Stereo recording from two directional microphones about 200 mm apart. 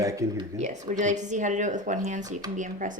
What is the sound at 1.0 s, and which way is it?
Speech, 35° right (ahead or behind).